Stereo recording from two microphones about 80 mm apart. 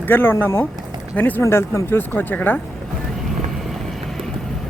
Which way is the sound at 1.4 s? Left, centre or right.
Left.